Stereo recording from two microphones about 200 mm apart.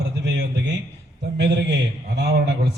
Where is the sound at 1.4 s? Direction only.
60° right (ahead or behind).